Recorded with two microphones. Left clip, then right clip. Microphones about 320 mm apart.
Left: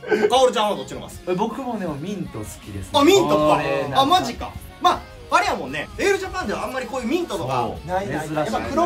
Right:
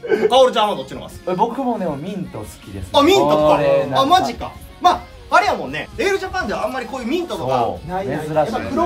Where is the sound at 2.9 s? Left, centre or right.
Centre.